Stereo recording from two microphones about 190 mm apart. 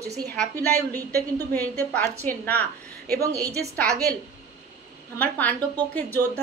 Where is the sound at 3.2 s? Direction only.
20° right (ahead or behind).